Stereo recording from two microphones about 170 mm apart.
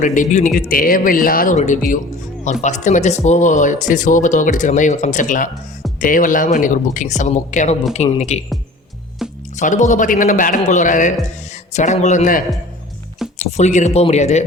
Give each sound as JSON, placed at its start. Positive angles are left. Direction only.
{"t": 0.0, "sound": "speech", "side_deg": 50}
{"t": 9.6, "sound": "speech", "side_deg": 45}
{"t": 13.4, "sound": "speech", "side_deg": 45}